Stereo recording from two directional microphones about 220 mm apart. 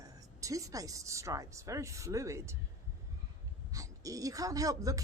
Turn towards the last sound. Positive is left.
turn(degrees=-15)  # may be behind; listen again after turning